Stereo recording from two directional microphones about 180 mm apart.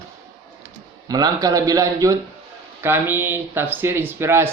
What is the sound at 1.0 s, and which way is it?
Speech, 20° right (ahead or behind).